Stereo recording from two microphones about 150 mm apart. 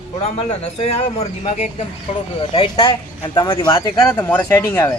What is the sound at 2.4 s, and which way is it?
Speech, 35° left (ahead or behind).